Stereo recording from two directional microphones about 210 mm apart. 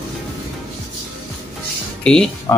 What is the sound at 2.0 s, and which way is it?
Speech, 5° left (ahead or behind).